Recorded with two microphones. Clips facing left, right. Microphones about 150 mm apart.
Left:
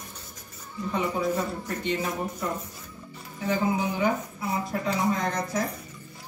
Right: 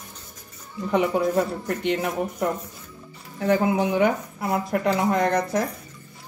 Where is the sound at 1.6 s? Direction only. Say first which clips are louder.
Right 4 dB; 65° right (ahead or behind).